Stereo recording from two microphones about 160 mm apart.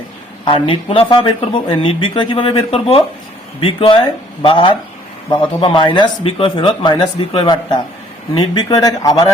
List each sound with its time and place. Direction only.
0.4 s speech: 35° left (ahead or behind)